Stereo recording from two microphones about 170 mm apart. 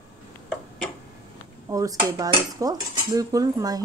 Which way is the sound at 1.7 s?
20° right (ahead or behind).